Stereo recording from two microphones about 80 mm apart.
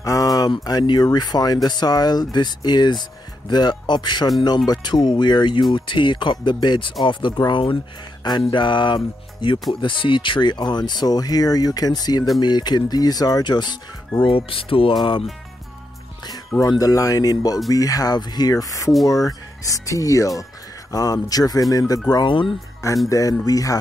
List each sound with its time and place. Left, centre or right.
0.0 s a sound: left
0.7 s speech: left
8.5 s speech: left
14.2 s speech: left
16.5 s speech: left
22.1 s speech: left
23.0 s speech: left